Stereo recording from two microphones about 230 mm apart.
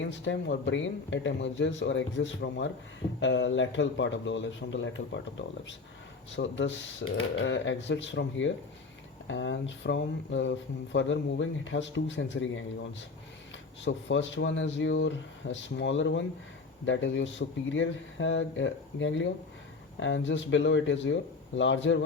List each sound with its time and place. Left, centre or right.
0.0 s speech: left
6.3 s speech: left